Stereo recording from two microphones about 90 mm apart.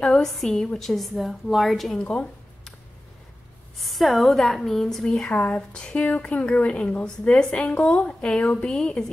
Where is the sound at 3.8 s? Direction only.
Centre (ahead or behind).